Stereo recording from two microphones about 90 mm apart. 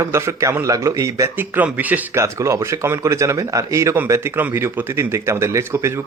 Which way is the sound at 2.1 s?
30° right (ahead or behind).